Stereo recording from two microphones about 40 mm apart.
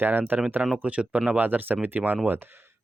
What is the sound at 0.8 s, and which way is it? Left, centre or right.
Speech, right.